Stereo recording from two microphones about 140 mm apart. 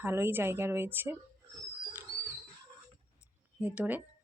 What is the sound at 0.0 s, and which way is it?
Speech, 15° right (ahead or behind).